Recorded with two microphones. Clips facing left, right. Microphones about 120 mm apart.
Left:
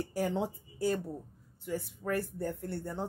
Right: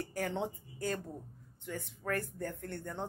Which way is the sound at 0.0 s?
15° left (ahead or behind).